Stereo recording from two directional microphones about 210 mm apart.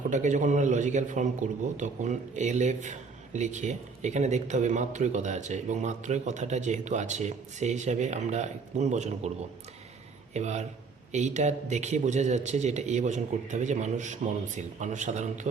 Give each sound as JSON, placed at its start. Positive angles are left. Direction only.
{"t": 0.1, "sound": "speech", "side_deg": -35}
{"t": 10.3, "sound": "speech", "side_deg": -35}